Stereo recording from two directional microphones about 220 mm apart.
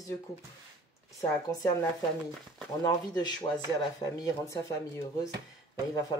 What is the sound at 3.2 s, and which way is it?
Speech, 20° left (ahead or behind).